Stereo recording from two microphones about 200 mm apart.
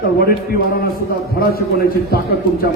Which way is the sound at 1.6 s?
50° left (ahead or behind).